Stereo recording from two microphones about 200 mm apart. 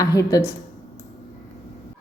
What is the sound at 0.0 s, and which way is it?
Speech, 20° left (ahead or behind).